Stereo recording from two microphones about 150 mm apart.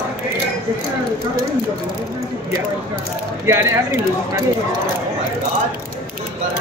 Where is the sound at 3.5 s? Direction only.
20° right (ahead or behind).